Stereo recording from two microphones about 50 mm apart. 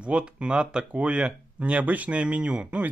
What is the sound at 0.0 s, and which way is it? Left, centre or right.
Speech, right.